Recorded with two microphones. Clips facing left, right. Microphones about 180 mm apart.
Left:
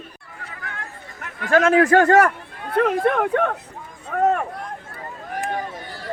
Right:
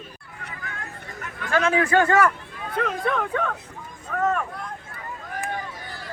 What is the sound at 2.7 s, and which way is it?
Speech, 60° left (ahead or behind).